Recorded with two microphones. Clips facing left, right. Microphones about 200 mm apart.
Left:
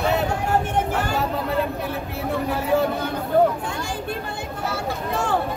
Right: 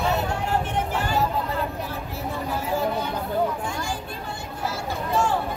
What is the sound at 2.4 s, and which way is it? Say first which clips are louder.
Speech: left 6 dB; 65° left (ahead or behind).